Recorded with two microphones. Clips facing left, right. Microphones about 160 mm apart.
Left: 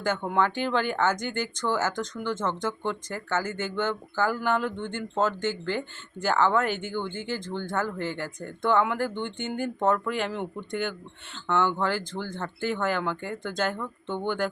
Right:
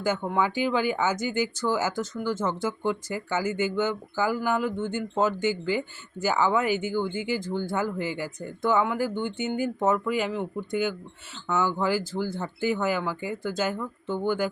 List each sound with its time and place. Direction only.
0.3 s speech: 10° right (ahead or behind)